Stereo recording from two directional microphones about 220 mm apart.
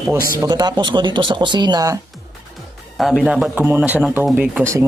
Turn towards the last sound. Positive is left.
turn(degrees=-10)  # may be behind; listen again after turning